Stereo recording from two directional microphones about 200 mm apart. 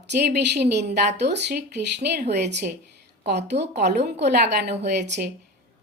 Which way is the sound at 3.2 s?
55° right (ahead or behind).